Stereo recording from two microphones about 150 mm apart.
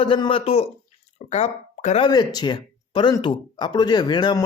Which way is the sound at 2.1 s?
30° left (ahead or behind).